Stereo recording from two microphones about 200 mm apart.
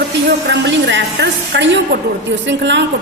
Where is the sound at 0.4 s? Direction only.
65° right (ahead or behind).